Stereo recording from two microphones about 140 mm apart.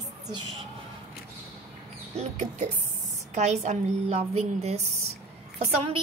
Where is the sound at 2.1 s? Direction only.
55° right (ahead or behind).